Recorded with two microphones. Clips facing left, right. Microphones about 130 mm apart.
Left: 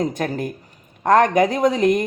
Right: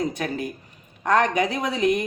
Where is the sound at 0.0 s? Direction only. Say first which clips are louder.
Left 4 dB; 45° left (ahead or behind).